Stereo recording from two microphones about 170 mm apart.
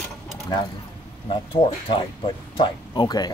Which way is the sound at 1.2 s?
30° left (ahead or behind).